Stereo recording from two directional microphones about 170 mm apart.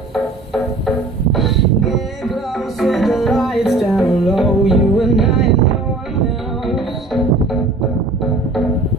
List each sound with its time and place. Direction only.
0.1 s music: centre (ahead or behind)
6.6 s music: centre (ahead or behind)